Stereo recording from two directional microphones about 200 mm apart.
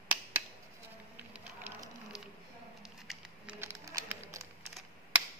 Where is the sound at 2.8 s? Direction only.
5° right (ahead or behind).